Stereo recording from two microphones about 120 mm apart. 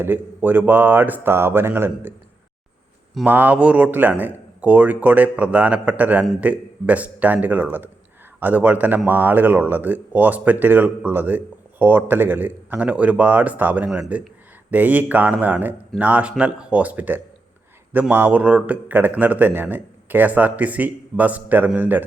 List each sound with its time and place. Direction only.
0.0 s speech: 15° right (ahead or behind)
3.2 s speech: 15° right (ahead or behind)